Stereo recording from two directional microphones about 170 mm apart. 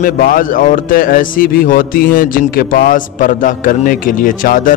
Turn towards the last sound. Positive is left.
turn(degrees=55)  # may be behind; listen again after turning